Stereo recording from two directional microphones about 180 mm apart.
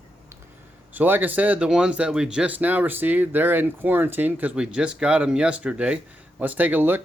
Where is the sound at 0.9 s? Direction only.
10° right (ahead or behind).